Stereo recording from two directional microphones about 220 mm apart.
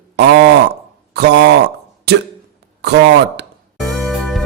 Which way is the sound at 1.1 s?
50° right (ahead or behind).